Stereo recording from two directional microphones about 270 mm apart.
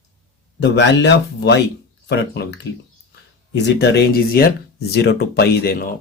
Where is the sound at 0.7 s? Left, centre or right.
Left.